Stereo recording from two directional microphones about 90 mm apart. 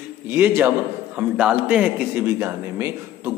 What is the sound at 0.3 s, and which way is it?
A man's voice, 25° right (ahead or behind).